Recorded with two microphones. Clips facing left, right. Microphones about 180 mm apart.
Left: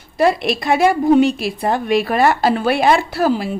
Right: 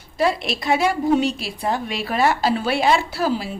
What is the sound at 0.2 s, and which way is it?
A woman's voice, 55° left (ahead or behind).